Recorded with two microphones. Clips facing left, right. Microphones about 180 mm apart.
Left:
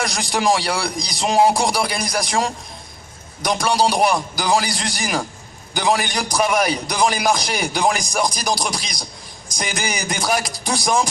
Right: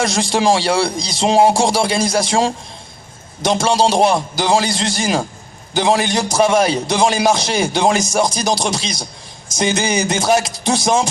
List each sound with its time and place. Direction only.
0.0 s a man's voice: 25° right (ahead or behind)